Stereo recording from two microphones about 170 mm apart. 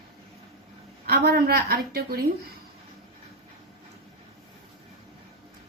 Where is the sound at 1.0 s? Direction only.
65° right (ahead or behind).